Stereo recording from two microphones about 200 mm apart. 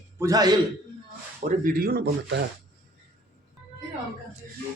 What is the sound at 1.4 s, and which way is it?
Speech, 45° right (ahead or behind).